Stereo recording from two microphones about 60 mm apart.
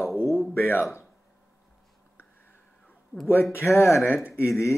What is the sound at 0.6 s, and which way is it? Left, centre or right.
Speech, left.